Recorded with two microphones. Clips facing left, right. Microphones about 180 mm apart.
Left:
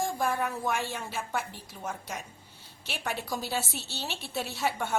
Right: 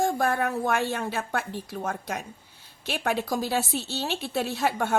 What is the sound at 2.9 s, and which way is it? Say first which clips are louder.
Speech: right 7 dB; 75° right (ahead or behind).